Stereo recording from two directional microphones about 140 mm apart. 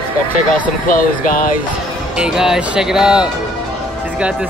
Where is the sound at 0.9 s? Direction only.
75° left (ahead or behind).